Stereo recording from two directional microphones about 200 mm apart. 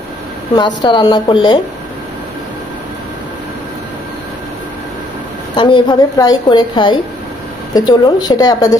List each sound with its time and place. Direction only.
0.8 s a woman's voice: 20° left (ahead or behind)
5.6 s a woman's voice: 20° left (ahead or behind)